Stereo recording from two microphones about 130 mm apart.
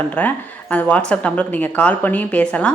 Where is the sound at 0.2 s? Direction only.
10° left (ahead or behind).